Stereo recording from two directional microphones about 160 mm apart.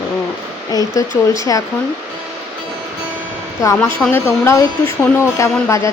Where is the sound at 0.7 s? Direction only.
25° left (ahead or behind).